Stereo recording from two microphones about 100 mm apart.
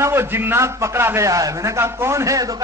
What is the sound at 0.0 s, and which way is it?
A man's voice, 25° right (ahead or behind).